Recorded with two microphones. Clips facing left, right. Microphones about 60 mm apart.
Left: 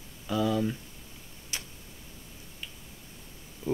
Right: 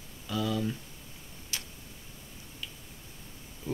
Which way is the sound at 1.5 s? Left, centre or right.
Left.